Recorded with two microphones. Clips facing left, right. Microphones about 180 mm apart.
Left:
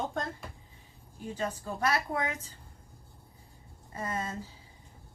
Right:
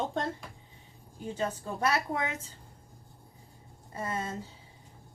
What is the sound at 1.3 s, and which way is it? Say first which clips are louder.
Speech: right 1 dB; 25° right (ahead or behind).